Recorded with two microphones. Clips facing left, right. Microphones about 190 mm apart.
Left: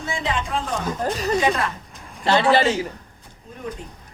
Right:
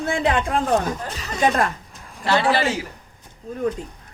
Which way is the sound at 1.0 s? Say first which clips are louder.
Left 9 dB; 40° left (ahead or behind).